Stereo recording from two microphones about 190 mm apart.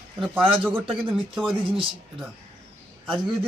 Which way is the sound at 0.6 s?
10° right (ahead or behind).